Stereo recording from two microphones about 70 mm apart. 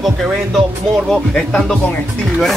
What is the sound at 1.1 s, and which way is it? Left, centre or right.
Speech, centre.